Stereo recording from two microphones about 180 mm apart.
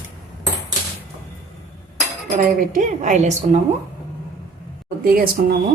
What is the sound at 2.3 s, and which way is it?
Speech, 45° right (ahead or behind).